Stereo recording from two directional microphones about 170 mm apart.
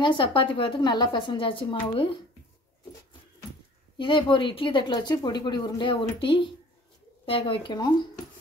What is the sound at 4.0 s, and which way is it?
A woman's voice, 30° left (ahead or behind).